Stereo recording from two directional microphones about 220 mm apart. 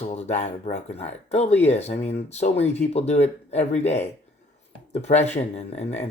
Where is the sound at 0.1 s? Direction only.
30° left (ahead or behind).